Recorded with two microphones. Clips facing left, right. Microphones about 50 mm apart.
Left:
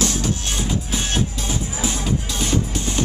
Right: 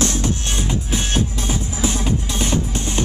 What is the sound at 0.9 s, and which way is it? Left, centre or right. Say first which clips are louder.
Music: right 4 dB; centre.